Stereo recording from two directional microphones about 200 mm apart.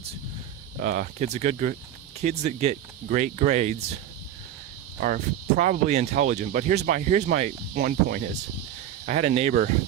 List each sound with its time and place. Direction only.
0.8 s speech: 40° right (ahead or behind)
4.9 s speech: 40° right (ahead or behind)
7.8 s speech: 50° right (ahead or behind)
9.0 s speech: 35° right (ahead or behind)